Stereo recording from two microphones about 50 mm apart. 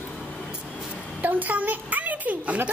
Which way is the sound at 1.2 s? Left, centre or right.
Right.